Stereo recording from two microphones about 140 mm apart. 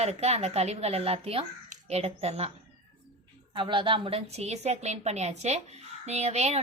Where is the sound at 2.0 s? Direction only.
45° right (ahead or behind).